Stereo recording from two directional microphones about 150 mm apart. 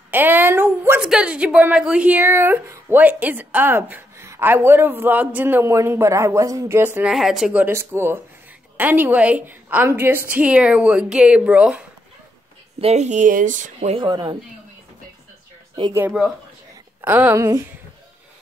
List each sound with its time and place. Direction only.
0.1 s a woman's voice: 15° right (ahead or behind)
12.8 s speech: 50° right (ahead or behind)
13.9 s speech: 30° right (ahead or behind)
17.0 s a woman's voice: 15° right (ahead or behind)